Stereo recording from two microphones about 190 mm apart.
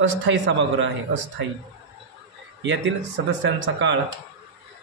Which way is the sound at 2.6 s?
75° right (ahead or behind).